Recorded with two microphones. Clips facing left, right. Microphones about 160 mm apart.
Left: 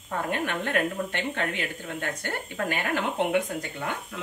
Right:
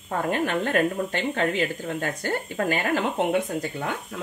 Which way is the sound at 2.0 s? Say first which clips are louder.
Right 3 dB; 40° right (ahead or behind).